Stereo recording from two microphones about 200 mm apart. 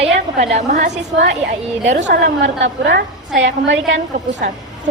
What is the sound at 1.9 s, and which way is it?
Speech, 35° right (ahead or behind).